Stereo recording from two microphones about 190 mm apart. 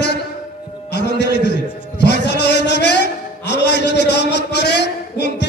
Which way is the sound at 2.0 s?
65° left (ahead or behind).